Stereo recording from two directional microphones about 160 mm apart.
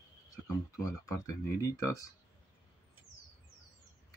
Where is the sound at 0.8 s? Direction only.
20° left (ahead or behind).